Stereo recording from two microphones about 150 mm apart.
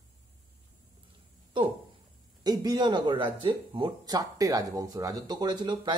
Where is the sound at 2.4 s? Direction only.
25° right (ahead or behind).